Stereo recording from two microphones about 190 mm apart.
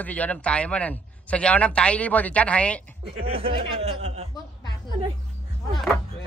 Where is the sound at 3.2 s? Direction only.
30° right (ahead or behind).